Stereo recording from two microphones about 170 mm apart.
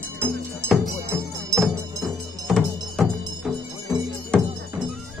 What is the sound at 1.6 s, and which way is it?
Music, centre (ahead or behind).